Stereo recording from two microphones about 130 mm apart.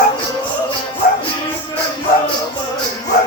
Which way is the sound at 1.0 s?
90° left.